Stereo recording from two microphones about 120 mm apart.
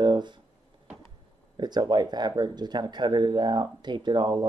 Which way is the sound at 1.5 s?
35° right (ahead or behind).